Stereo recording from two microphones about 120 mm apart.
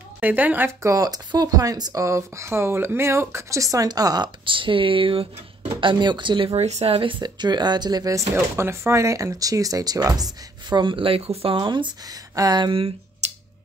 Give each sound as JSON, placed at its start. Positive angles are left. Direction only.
{"t": 0.2, "sound": "speech", "side_deg": -15}
{"t": 6.6, "sound": "speech", "side_deg": -60}
{"t": 8.5, "sound": "speech", "side_deg": -20}